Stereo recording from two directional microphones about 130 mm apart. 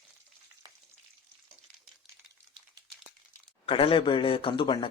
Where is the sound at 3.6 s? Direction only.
45° left (ahead or behind).